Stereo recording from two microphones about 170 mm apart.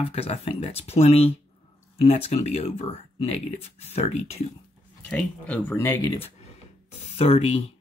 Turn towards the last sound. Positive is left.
turn(degrees=35)  # may be behind; listen again after turning